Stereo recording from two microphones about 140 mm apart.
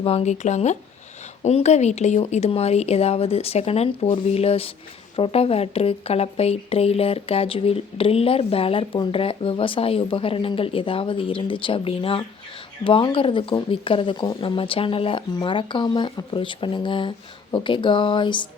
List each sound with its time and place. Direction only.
0.0 s speech: 45° left (ahead or behind)